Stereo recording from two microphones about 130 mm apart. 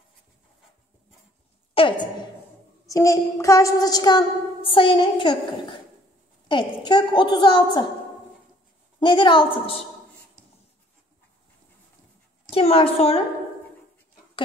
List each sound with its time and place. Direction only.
1.7 s a sound: 40° left (ahead or behind)
2.9 s a woman's voice: 25° left (ahead or behind)
4.6 s a woman's voice: 40° left (ahead or behind)
6.5 s a woman's voice: 35° left (ahead or behind)
9.0 s a woman's voice: 40° left (ahead or behind)
12.4 s a woman's voice: 50° left (ahead or behind)